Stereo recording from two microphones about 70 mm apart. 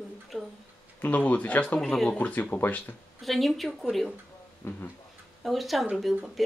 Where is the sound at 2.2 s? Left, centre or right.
Left.